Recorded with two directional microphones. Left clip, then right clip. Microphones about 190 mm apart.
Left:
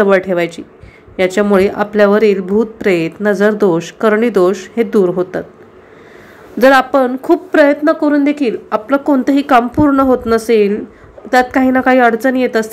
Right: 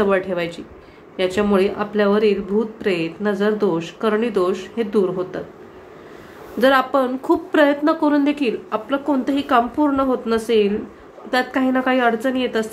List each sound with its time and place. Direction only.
0.0 s speech: 30° left (ahead or behind)
6.6 s speech: 35° left (ahead or behind)